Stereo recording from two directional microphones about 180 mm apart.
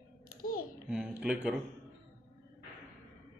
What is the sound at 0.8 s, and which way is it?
Speech, 5° right (ahead or behind).